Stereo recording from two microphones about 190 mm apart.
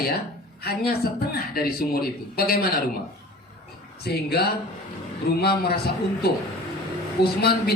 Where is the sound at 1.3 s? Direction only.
55° left (ahead or behind).